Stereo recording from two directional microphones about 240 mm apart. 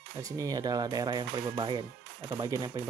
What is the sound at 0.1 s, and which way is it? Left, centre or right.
Speech, centre.